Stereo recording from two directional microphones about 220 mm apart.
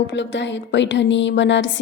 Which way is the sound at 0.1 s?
55° left (ahead or behind).